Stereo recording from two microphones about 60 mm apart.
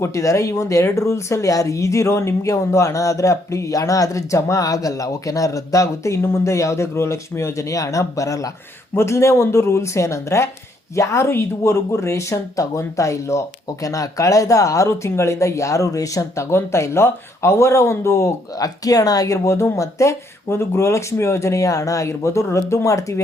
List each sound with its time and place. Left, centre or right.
0.0 s speech: left
6.2 s speech: left
9.0 s speech: left
13.7 s speech: left
18.5 s speech: left